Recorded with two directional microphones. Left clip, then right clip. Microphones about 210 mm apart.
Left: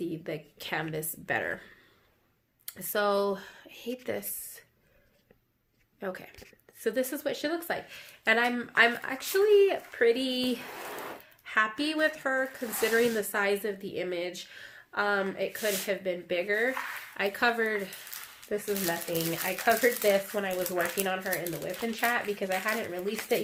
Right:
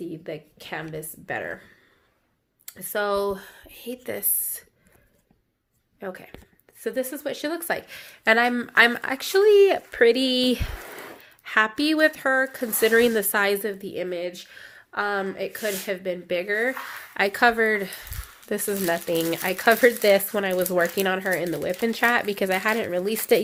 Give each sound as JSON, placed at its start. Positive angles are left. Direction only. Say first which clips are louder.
{"t": 0.0, "sound": "speech", "louder": "right 2 dB", "side_deg": -5}
{"t": 2.6, "sound": "speech", "louder": "right 3 dB", "side_deg": -10}
{"t": 6.0, "sound": "speech", "louder": "right 2 dB", "side_deg": -10}
{"t": 17.2, "sound": "speech", "louder": "right 8 dB", "side_deg": -35}
{"t": 18.4, "sound": "speech", "louder": "right 6 dB", "side_deg": -55}